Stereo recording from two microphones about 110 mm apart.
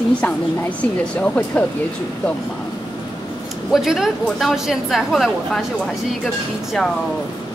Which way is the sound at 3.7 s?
5° right (ahead or behind).